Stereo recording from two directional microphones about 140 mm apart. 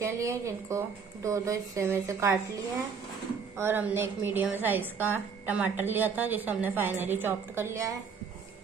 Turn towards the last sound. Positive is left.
turn(degrees=-20)  # may be behind; listen again after turning